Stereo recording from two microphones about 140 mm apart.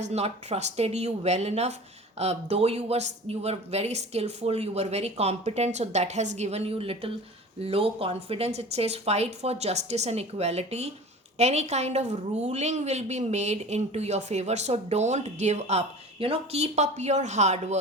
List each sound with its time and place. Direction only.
0.0 s speech: 50° right (ahead or behind)
16.1 s speech: 40° right (ahead or behind)